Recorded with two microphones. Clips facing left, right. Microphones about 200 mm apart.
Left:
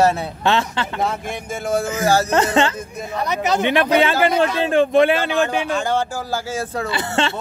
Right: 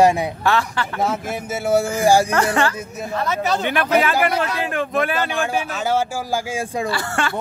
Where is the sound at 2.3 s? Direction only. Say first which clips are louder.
Left 2 dB; 20° left (ahead or behind).